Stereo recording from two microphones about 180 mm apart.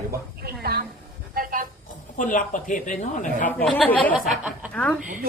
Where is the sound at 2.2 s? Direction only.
45° left (ahead or behind).